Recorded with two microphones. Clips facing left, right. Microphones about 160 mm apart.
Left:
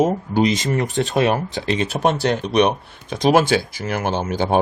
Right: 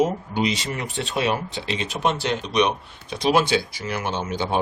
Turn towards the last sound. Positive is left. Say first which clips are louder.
# left 5 dB
turn(degrees=45)  # may be behind; listen again after turning